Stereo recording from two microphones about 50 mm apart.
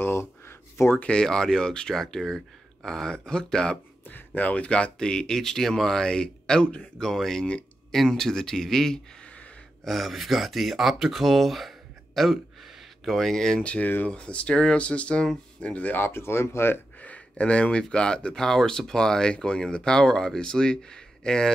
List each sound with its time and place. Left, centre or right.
0.0 s speech: left
1.1 s speech: centre
4.4 s speech: left
7.0 s speech: centre
13.6 s speech: left
16.0 s speech: left
17.0 s speech: left